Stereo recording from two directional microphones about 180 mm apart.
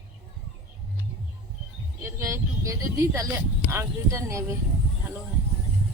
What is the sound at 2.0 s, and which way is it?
Speech, 15° right (ahead or behind).